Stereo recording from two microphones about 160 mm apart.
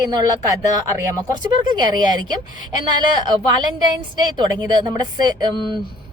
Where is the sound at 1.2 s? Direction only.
25° right (ahead or behind).